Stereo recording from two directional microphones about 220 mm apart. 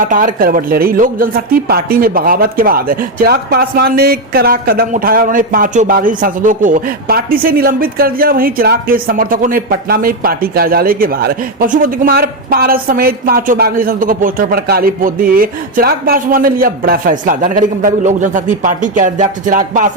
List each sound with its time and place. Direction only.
0.0 s speech: 40° right (ahead or behind)